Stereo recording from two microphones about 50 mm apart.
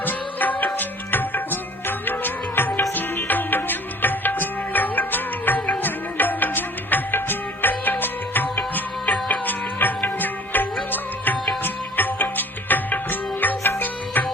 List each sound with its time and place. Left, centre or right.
0.0 s music: left